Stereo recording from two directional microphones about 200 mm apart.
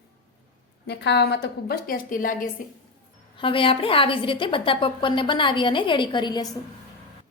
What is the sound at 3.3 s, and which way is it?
A woman's voice, 25° left (ahead or behind).